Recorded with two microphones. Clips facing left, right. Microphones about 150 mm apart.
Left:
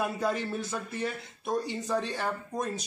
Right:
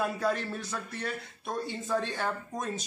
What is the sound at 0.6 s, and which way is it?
Speech, 20° left (ahead or behind).